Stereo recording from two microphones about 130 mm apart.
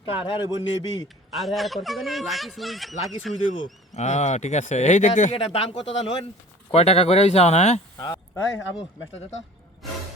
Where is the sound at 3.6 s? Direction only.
60° left (ahead or behind).